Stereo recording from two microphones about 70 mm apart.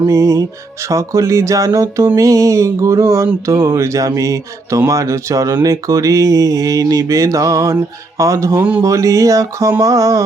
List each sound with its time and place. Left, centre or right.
0.0 s mantra: right